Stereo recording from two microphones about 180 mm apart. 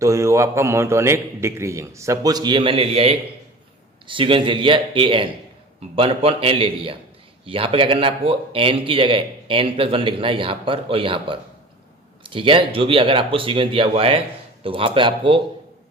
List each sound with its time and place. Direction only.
0.0 s a man's voice: 15° right (ahead or behind)